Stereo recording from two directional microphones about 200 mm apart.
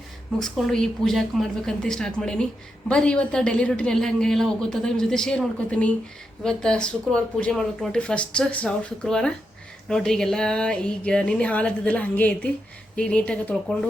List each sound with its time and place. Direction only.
0.3 s a woman's voice: centre (ahead or behind)